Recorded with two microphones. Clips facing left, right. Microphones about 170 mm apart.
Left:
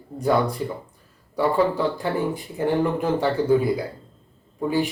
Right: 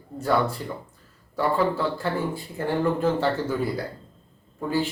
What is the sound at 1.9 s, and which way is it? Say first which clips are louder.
Speech: left 2 dB; 15° left (ahead or behind).